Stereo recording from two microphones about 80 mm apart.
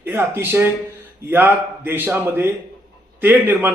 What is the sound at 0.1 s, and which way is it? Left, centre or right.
A man's voice, right.